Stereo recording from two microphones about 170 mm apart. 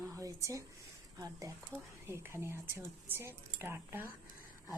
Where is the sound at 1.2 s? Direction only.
20° right (ahead or behind).